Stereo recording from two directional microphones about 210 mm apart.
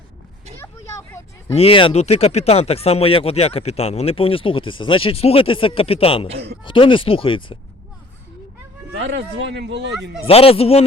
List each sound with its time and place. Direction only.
1.5 s speech: 25° left (ahead or behind)
9.0 s speech: 55° right (ahead or behind)
10.2 s speech: 25° left (ahead or behind)